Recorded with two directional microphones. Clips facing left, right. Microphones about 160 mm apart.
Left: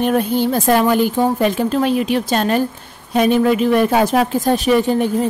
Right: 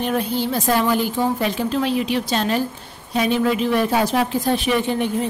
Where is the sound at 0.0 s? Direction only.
55° left (ahead or behind).